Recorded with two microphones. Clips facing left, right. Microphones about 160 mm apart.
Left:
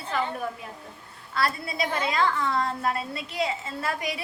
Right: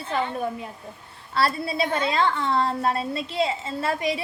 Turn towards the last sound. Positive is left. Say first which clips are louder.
# right 5 dB
turn(degrees=-25)  # may be behind; listen again after turning